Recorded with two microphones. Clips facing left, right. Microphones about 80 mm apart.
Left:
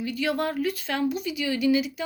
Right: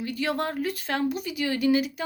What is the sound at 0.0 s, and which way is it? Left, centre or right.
Speech, right.